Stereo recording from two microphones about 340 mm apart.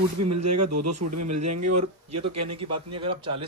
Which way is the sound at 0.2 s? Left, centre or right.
Right.